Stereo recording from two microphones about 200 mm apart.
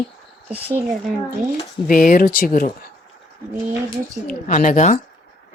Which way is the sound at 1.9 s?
45° left (ahead or behind).